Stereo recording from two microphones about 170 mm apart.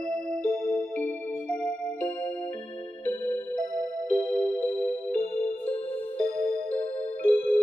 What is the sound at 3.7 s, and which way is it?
Music, 50° right (ahead or behind).